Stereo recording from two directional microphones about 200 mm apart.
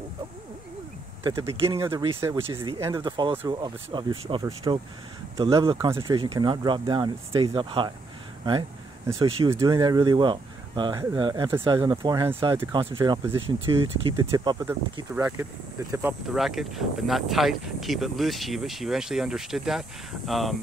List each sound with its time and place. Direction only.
1.2 s speech: 15° right (ahead or behind)
1.5 s speech: 25° right (ahead or behind)
1.8 s speech: 15° right (ahead or behind)
2.4 s speech: 25° right (ahead or behind); by 20.5 s centre (ahead or behind)